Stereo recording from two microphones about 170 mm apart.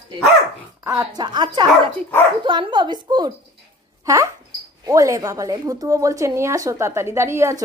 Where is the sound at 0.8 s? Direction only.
20° right (ahead or behind).